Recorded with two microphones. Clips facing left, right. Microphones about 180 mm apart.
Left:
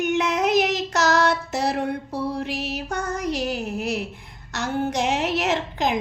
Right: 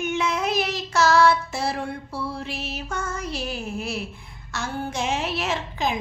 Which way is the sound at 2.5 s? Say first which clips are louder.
Left 4 dB; 15° left (ahead or behind).